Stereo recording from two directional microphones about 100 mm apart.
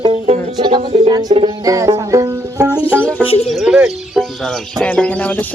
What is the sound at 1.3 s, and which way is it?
Music, 70° right (ahead or behind).